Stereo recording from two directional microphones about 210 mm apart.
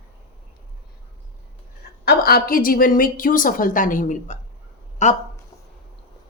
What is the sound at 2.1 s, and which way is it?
A woman's voice, 45° left (ahead or behind).